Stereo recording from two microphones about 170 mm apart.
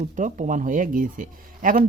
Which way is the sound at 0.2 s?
45° right (ahead or behind).